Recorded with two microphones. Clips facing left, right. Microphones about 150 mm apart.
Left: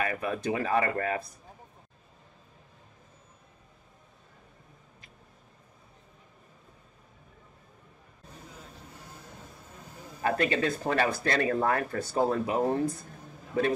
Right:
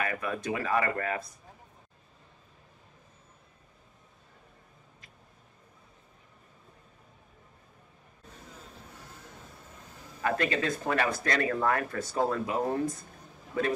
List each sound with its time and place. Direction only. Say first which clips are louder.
0.0 s speech: left 2 dB; 30° left (ahead or behind)
10.2 s speech: left 2 dB; 30° left (ahead or behind)